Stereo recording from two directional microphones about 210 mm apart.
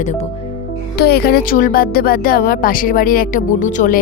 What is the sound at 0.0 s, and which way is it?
Speech, 35° left (ahead or behind).